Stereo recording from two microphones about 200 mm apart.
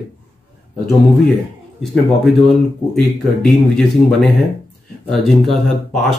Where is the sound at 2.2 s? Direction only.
Centre (ahead or behind).